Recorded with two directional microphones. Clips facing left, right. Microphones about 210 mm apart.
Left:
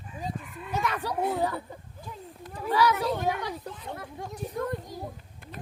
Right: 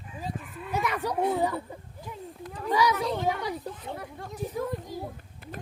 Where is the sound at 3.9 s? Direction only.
15° right (ahead or behind).